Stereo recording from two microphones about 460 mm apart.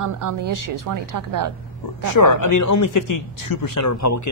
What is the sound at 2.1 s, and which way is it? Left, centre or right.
Speech, left.